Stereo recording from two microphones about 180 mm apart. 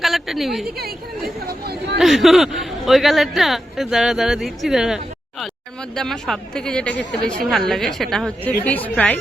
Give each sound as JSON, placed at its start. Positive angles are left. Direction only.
{"t": 0.0, "sound": "a woman's voice", "side_deg": 0}
{"t": 0.8, "sound": "speech", "side_deg": -60}
{"t": 2.0, "sound": "speech", "side_deg": 0}